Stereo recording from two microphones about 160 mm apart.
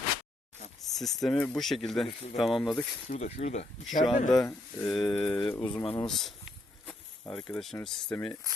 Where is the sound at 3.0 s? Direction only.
45° left (ahead or behind).